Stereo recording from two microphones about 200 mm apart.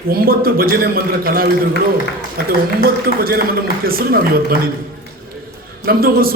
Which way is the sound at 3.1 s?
45° right (ahead or behind).